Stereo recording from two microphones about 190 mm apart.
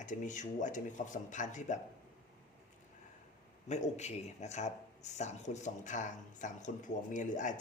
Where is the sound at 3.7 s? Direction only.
35° left (ahead or behind).